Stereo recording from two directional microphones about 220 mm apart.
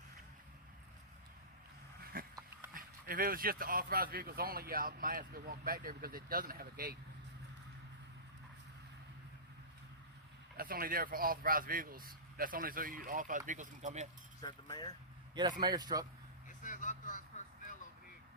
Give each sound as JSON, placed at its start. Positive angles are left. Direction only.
{"t": 2.1, "sound": "dog", "side_deg": -40}
{"t": 2.7, "sound": "speech", "side_deg": -40}
{"t": 10.6, "sound": "speech", "side_deg": -40}
{"t": 14.4, "sound": "speech", "side_deg": 20}
{"t": 15.6, "sound": "a man's voice", "side_deg": -20}
{"t": 16.5, "sound": "vehicle", "side_deg": 35}